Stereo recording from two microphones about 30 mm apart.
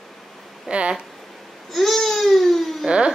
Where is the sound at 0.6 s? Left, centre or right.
Right.